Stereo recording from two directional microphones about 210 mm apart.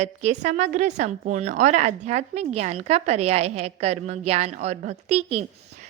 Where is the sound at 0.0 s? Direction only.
35° right (ahead or behind).